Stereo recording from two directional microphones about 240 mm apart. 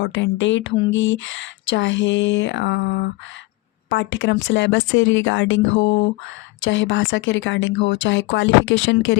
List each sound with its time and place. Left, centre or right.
0.0 s speech: left